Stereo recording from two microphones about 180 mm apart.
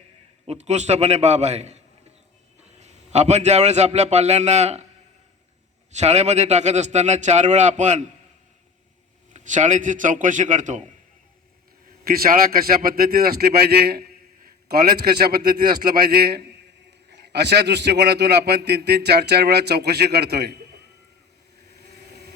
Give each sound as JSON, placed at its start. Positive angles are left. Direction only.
{"t": 0.4, "sound": "a man's voice", "side_deg": -40}
{"t": 2.8, "sound": "a man's voice", "side_deg": -40}
{"t": 5.9, "sound": "a man's voice", "side_deg": -35}
{"t": 9.3, "sound": "a man's voice", "side_deg": -40}
{"t": 12.0, "sound": "a man's voice", "side_deg": -55}
{"t": 17.1, "sound": "a man's voice", "side_deg": -70}